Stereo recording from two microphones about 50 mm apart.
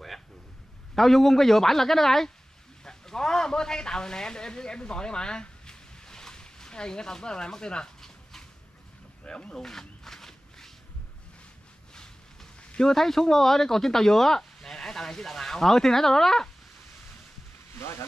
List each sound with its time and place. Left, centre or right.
0.9 s a man's voice: centre
2.8 s a sound: centre
11.9 s speech: centre
17.7 s speech: left